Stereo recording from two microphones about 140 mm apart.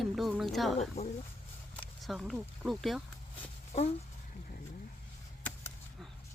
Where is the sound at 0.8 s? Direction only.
50° left (ahead or behind).